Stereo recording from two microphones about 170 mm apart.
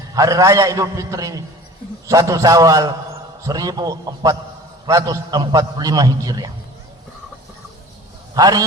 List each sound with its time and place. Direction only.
0.1 s a man's voice: 20° right (ahead or behind)
8.4 s a man's voice: 20° right (ahead or behind)